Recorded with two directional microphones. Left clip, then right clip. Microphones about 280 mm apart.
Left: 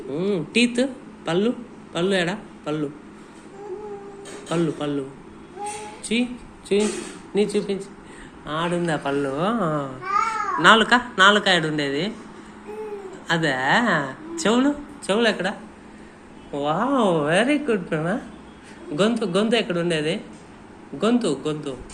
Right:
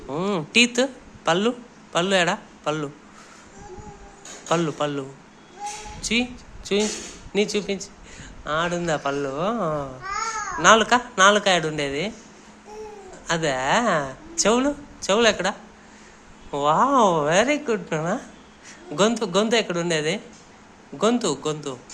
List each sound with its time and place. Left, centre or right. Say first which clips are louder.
0.1 s a man's voice: right 1 dB; right
4.4 s speech: right 2 dB; right
6.7 s speech: left 2 dB; right
13.2 s a woman's voice: left 1 dB; right
16.6 s speech: right 4 dB; right